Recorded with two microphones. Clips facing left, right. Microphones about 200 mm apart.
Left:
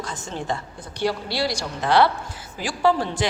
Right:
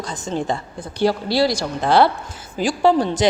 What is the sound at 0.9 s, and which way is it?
Speech, 90° right.